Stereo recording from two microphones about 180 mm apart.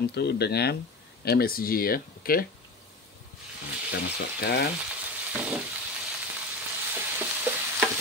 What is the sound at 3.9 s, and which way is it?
Speech, 65° left (ahead or behind).